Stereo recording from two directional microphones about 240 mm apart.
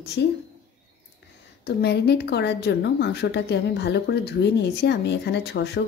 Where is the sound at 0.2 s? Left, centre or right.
Left.